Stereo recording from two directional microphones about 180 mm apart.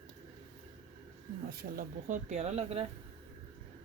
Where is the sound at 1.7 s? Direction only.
45° right (ahead or behind).